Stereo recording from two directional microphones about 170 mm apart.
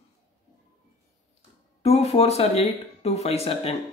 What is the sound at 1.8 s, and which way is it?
Speech, 40° left (ahead or behind).